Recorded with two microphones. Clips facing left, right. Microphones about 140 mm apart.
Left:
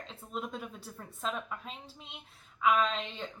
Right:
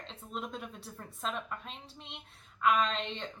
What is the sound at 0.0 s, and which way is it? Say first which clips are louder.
A woman's voice: left 1 dB; 5° left (ahead or behind).